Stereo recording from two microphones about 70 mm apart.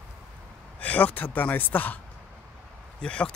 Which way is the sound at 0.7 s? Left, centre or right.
Left.